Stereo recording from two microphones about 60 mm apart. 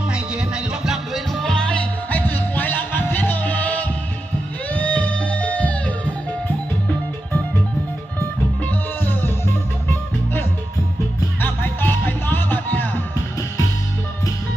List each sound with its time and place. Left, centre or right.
0.1 s music: centre
1.1 s music: centre
2.0 s music: left
8.6 s music: left
11.3 s music: left